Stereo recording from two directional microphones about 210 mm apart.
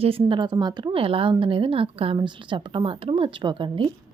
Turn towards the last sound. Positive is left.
turn(degrees=-25)  # may be behind; listen again after turning